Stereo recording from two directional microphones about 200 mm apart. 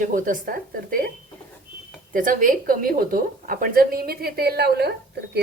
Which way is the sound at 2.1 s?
40° right (ahead or behind).